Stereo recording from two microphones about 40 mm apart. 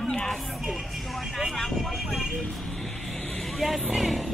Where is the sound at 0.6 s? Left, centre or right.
Centre.